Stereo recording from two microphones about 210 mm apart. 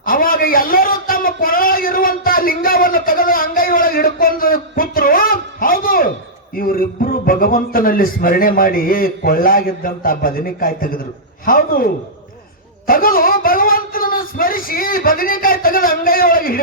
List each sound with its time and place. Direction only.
0.0 s a sound: 40° left (ahead or behind)
6.6 s a man's voice: 45° left (ahead or behind)
12.9 s speech: 45° left (ahead or behind)